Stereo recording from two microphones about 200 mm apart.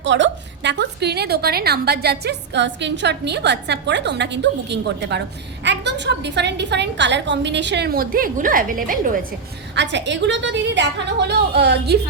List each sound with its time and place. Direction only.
0.0 s a woman's voice: 65° right (ahead or behind); by 9.0 s 45° right (ahead or behind)
9.7 s a woman's voice: 60° right (ahead or behind)